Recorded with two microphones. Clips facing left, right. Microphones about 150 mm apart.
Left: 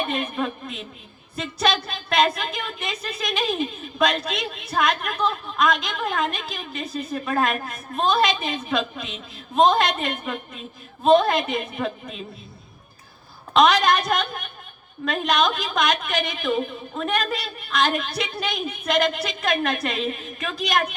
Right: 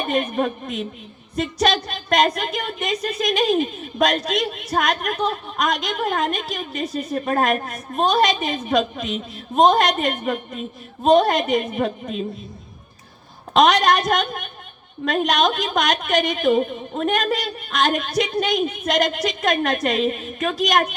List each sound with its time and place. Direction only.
0.0 s a woman's voice: 45° right (ahead or behind)
13.5 s a woman's voice: 45° right (ahead or behind)